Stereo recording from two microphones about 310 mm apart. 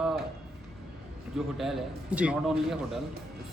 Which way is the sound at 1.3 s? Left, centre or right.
Centre.